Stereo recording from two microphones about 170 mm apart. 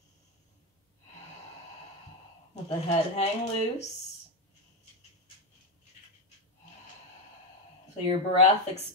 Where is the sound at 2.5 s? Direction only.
40° left (ahead or behind).